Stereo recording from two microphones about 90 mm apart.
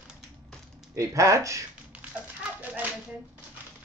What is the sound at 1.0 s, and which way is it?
Speech, 35° right (ahead or behind).